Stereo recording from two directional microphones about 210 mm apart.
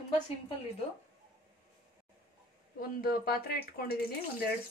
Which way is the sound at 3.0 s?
45° left (ahead or behind).